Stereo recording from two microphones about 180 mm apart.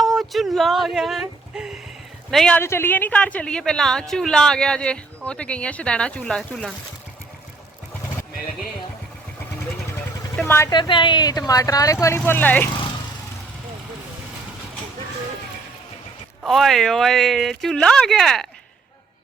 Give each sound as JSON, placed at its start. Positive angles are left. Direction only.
{"t": 0.0, "sound": "speech", "side_deg": 0}
{"t": 10.4, "sound": "speech", "side_deg": 15}
{"t": 16.4, "sound": "speech", "side_deg": 0}